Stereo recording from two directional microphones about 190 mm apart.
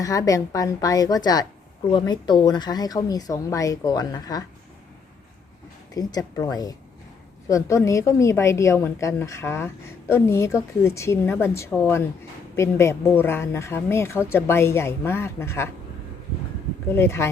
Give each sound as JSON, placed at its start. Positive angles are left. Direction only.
{"t": 0.0, "sound": "a woman's voice", "side_deg": 20}
{"t": 5.9, "sound": "a woman's voice", "side_deg": 20}
{"t": 16.9, "sound": "speech", "side_deg": 15}